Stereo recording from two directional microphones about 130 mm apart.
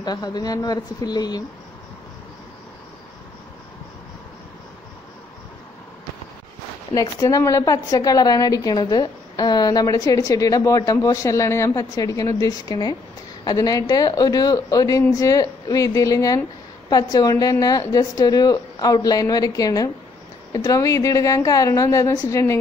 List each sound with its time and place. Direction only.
0.0 s speech: 30° left (ahead or behind)
6.9 s a woman's voice: 25° left (ahead or behind)